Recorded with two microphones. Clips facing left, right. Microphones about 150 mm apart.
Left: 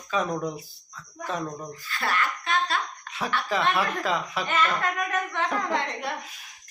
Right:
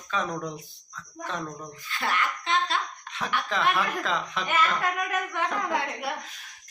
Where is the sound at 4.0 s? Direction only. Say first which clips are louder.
Left 2 dB; 5° left (ahead or behind).